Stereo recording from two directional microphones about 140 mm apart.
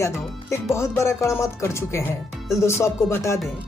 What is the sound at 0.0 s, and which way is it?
Speech, 20° left (ahead or behind).